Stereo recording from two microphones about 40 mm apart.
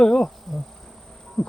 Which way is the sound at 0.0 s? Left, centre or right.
Left.